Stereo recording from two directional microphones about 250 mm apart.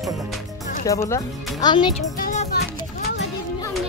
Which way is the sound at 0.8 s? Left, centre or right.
Centre.